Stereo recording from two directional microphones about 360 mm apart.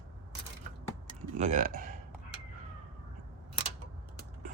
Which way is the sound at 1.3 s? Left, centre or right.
Centre.